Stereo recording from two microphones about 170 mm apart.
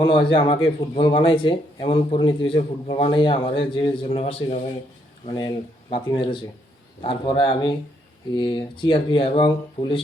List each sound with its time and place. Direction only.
0.0 s a man's voice: 30° left (ahead or behind)